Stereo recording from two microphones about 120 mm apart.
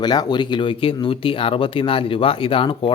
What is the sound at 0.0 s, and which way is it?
Speech, 35° left (ahead or behind).